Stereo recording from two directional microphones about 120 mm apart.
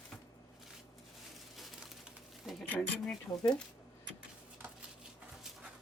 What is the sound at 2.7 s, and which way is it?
Speech, 5° left (ahead or behind).